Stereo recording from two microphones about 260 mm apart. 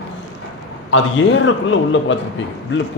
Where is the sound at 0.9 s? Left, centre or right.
Left.